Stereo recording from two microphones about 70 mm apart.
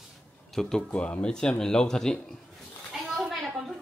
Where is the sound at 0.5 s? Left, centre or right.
Centre.